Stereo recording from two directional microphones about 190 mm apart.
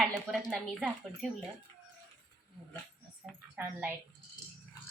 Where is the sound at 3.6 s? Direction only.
10° right (ahead or behind).